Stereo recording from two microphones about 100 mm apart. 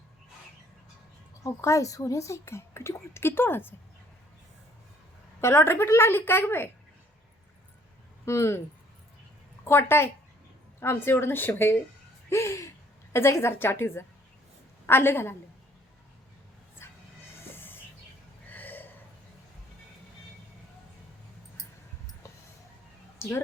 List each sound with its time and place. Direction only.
1.5 s speech: 30° left (ahead or behind)
5.4 s speech: 25° left (ahead or behind)
8.2 s speech: 30° left (ahead or behind)
9.6 s speech: 25° left (ahead or behind)
16.8 s music: 25° left (ahead or behind)
18.4 s a sound: 20° left (ahead or behind)
23.1 s a sound: 25° left (ahead or behind)